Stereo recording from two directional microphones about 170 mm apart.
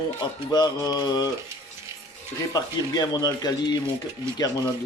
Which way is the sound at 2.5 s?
20° left (ahead or behind).